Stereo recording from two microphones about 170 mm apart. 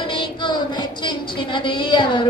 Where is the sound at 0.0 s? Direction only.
30° left (ahead or behind).